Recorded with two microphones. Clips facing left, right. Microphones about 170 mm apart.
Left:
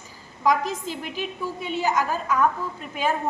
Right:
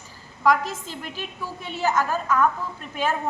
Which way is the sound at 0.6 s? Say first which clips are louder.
Left 3 dB; 15° left (ahead or behind).